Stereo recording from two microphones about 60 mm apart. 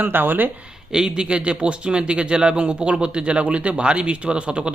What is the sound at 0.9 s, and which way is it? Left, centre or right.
Speech, centre.